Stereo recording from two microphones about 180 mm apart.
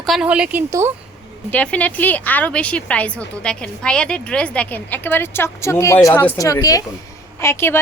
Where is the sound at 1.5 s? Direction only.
5° left (ahead or behind).